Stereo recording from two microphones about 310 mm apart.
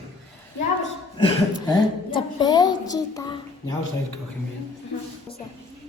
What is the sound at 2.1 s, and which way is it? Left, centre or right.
A child's voice, centre.